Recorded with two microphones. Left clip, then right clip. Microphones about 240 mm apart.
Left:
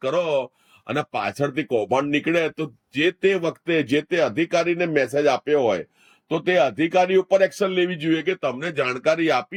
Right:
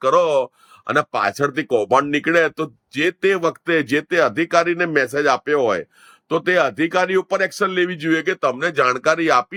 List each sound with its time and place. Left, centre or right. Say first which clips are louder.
0.0 s speech: right 6 dB; centre